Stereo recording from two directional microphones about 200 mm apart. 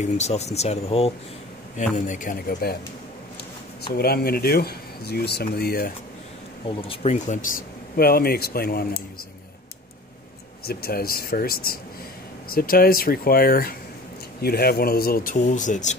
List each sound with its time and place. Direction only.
0.0 s speech: 35° left (ahead or behind)
3.9 s speech: 50° left (ahead or behind)
6.8 s speech: 30° left (ahead or behind); by 9.0 s 50° left (ahead or behind)
10.6 s speech: 50° left (ahead or behind)